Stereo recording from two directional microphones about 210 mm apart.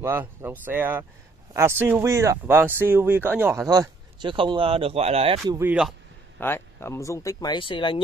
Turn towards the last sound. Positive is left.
turn(degrees=25)  # may be behind; listen again after turning